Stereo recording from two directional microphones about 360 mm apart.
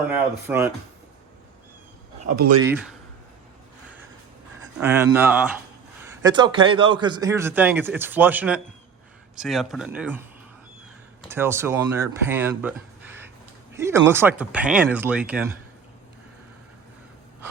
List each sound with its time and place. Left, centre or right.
0.1 s speech: centre
2.2 s speech: right
2.6 s a man's voice: centre
4.8 s a man's voice: centre
11.3 s a man's voice: centre